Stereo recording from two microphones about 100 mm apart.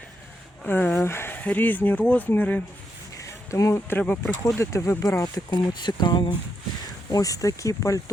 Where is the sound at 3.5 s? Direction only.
30° left (ahead or behind).